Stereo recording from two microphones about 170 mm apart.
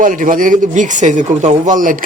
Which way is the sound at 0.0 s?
50° right (ahead or behind).